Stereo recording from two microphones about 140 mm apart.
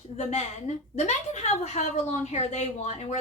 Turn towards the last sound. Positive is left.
turn(degrees=55)  # may be behind; listen again after turning